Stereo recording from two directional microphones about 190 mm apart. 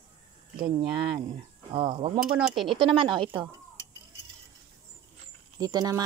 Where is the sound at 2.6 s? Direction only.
25° right (ahead or behind).